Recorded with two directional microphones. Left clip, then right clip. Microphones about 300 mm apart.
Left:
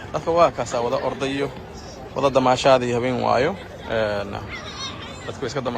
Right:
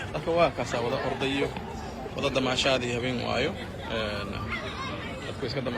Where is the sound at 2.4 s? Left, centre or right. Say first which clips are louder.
Left 10 dB; centre.